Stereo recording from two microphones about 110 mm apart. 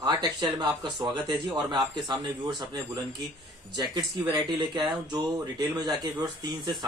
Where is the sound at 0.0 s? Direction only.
40° right (ahead or behind).